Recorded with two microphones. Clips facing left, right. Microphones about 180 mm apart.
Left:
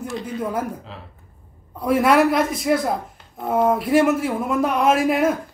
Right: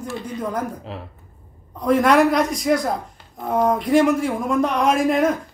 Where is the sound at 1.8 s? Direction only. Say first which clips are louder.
Right 1 dB; 5° left (ahead or behind).